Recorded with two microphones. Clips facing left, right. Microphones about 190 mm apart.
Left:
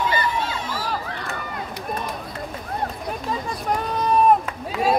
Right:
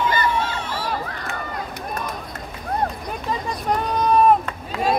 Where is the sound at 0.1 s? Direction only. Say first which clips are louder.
Right 2 dB; 45° right (ahead or behind).